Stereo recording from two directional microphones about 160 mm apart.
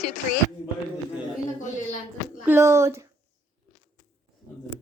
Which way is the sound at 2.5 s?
15° right (ahead or behind).